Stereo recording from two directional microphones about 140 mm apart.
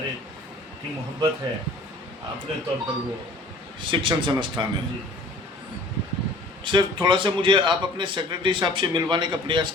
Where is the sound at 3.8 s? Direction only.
35° right (ahead or behind).